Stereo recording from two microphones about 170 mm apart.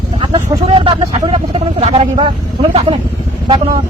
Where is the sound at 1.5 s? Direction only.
40° right (ahead or behind).